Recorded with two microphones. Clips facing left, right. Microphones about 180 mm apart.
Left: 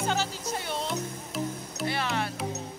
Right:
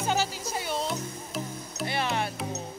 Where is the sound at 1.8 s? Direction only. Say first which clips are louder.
Right 1 dB; 20° right (ahead or behind).